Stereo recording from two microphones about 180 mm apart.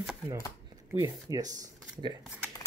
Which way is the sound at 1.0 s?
20° right (ahead or behind).